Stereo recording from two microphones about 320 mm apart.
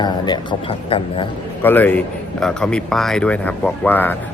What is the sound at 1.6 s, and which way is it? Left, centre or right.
Speech, centre.